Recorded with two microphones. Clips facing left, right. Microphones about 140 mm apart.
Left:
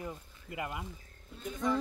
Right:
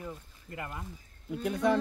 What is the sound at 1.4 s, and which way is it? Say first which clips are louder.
Speech: right 6 dB; 70° right (ahead or behind).